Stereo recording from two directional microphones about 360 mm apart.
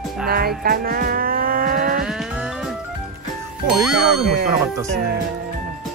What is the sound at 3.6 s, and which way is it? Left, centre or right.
Speech, centre.